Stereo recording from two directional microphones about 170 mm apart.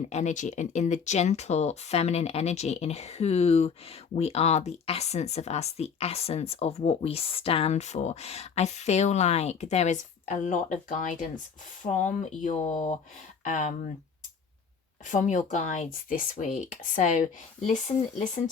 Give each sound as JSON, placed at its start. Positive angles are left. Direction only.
{"t": 0.1, "sound": "speech", "side_deg": 45}
{"t": 15.0, "sound": "speech", "side_deg": 45}